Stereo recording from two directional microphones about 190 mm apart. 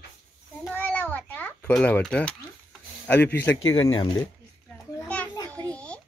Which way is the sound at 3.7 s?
25° left (ahead or behind).